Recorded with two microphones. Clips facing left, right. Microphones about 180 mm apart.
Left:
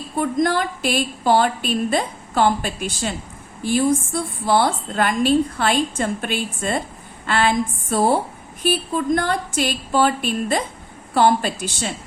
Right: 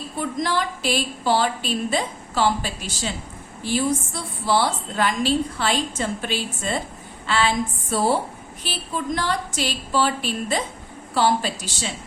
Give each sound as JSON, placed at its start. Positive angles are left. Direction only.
{"t": 0.2, "sound": "a woman's voice", "side_deg": 50}